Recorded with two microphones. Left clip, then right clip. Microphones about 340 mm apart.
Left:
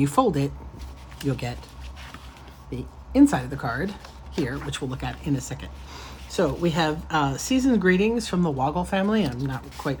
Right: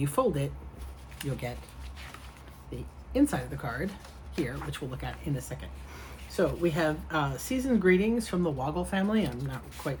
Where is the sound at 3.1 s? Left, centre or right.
Left.